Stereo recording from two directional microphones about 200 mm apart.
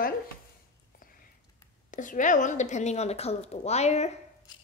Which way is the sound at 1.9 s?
40° left (ahead or behind).